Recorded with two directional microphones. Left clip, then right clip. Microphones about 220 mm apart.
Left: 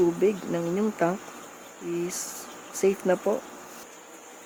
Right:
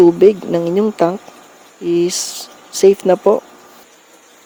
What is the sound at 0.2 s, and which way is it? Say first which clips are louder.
Speech: right 14 dB; 40° right (ahead or behind).